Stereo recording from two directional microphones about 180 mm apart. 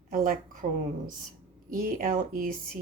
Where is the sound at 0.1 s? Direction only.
50° right (ahead or behind).